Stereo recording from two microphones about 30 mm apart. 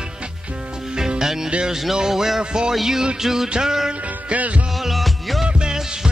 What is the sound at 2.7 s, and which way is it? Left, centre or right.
Music, centre.